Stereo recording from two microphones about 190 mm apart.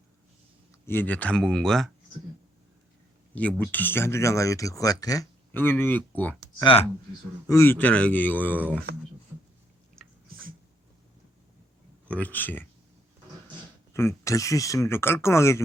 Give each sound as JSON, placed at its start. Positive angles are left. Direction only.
{"t": 0.9, "sound": "speech", "side_deg": 10}
{"t": 3.3, "sound": "speech", "side_deg": 10}
{"t": 6.6, "sound": "speech", "side_deg": 25}
{"t": 7.4, "sound": "speech", "side_deg": 15}
{"t": 10.2, "sound": "cat", "side_deg": -50}
{"t": 12.0, "sound": "speech", "side_deg": 5}
{"t": 13.9, "sound": "speech", "side_deg": 15}